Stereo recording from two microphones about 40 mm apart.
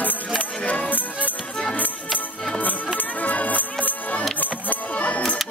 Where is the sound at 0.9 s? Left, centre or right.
Left.